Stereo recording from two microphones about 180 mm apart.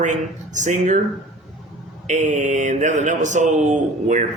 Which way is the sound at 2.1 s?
45° right (ahead or behind).